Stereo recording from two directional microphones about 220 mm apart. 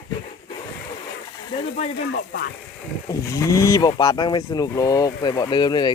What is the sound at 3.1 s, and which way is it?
Speech, 15° left (ahead or behind).